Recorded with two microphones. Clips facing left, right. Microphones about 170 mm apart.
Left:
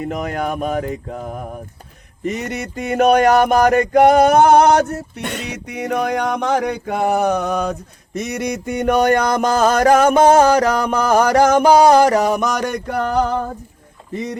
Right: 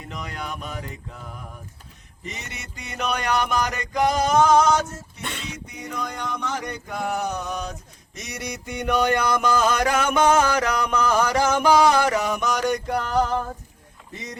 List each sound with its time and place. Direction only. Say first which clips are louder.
0.0 s speech: left 12 dB; 50° left (ahead or behind)
2.2 s mantra: left 14 dB; 50° left (ahead or behind)
11.1 s music: left 10 dB; 55° left (ahead or behind); by 12.5 s 40° left (ahead or behind)
12.9 s mantra: left 5 dB; 55° left (ahead or behind)